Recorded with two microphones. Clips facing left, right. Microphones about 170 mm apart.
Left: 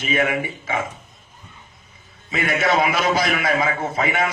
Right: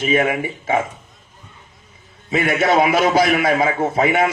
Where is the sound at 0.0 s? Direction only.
35° right (ahead or behind).